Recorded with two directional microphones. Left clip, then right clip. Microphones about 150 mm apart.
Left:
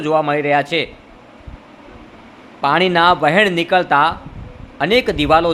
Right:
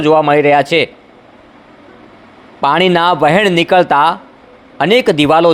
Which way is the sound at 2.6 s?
45° right (ahead or behind).